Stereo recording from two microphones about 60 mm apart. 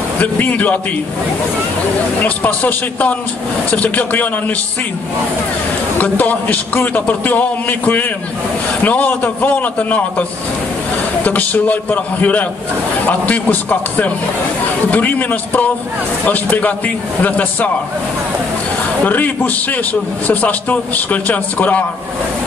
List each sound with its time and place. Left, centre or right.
0.2 s a man's voice: left
2.2 s a man's voice: left
5.9 s a man's voice: left
11.2 s a man's voice: left
19.0 s a man's voice: left